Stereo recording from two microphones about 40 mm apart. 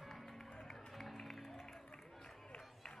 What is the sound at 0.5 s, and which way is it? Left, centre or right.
Music, centre.